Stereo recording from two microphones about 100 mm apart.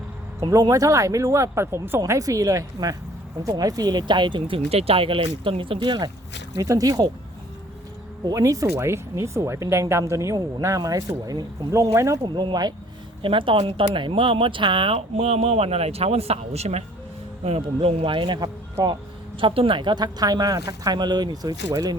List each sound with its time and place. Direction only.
0.5 s speech: 35° right (ahead or behind)
2.0 s speech: 35° right (ahead or behind); by 6.1 s 50° right (ahead or behind)
6.6 s speech: 35° right (ahead or behind)
8.2 s speech: 35° right (ahead or behind)
12.2 s speech: 55° right (ahead or behind)
13.2 s speech: 60° right (ahead or behind); by 18.9 s 40° right (ahead or behind)
19.4 s speech: 60° right (ahead or behind); by 21.5 s 45° right (ahead or behind)